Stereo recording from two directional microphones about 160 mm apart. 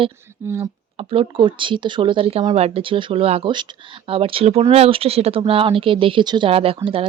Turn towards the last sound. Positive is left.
turn(degrees=-35)  # may be behind; listen again after turning